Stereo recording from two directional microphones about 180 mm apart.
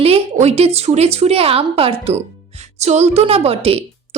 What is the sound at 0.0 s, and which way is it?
A woman's voice, 35° right (ahead or behind).